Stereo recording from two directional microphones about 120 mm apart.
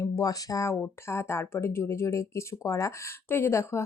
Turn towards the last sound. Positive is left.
turn(degrees=20)  # may be behind; listen again after turning